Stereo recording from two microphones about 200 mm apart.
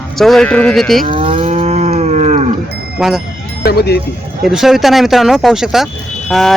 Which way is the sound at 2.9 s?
Centre (ahead or behind).